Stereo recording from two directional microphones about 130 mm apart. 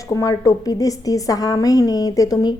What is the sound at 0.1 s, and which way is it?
A woman's voice, 30° left (ahead or behind).